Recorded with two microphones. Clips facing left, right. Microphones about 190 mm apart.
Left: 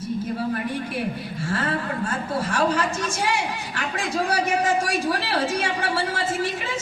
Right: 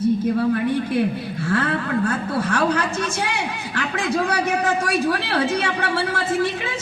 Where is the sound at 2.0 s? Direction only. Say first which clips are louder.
Right 4 dB; 60° right (ahead or behind).